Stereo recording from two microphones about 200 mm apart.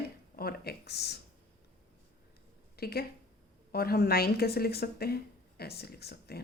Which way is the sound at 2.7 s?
50° left (ahead or behind).